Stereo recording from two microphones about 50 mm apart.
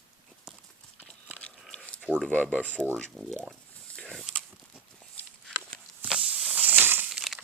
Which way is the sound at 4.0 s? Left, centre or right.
Centre.